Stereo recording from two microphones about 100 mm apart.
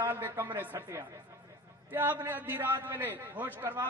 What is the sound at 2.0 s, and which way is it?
A man's voice, 20° right (ahead or behind).